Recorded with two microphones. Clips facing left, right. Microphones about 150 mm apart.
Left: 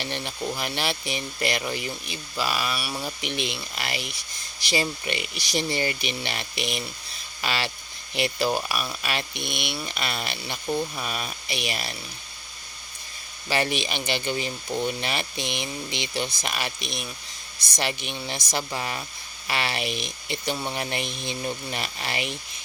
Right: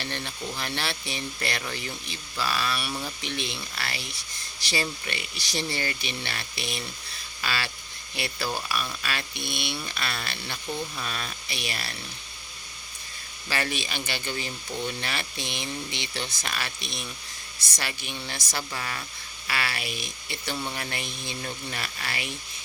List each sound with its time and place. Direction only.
0.0 s speech: 15° left (ahead or behind)
13.5 s speech: 15° left (ahead or behind)